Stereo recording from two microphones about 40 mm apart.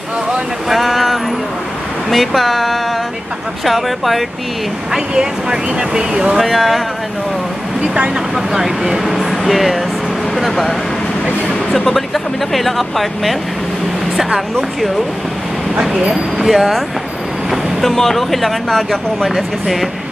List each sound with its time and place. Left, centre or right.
0.7 s a sound: centre
2.0 s speech: centre
4.9 s speech: centre
6.3 s speech: centre
7.8 s speech: right; by 13.4 s centre
15.8 s speech: centre
17.5 s vehicle: centre
17.9 s speech: centre